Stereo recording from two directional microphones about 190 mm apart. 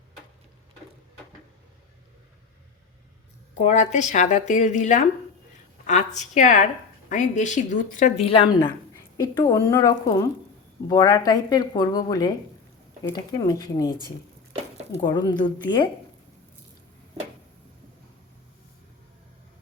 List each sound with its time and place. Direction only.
3.6 s speech: 35° left (ahead or behind); by 13.9 s 20° left (ahead or behind)
14.9 s speech: 20° left (ahead or behind)